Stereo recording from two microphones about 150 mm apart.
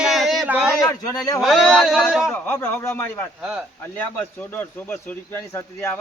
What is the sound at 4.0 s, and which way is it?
A man's voice, 15° left (ahead or behind).